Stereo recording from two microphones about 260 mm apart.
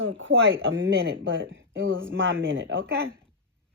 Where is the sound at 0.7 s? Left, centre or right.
Right.